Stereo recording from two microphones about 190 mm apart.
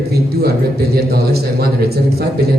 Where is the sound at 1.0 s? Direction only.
55° right (ahead or behind).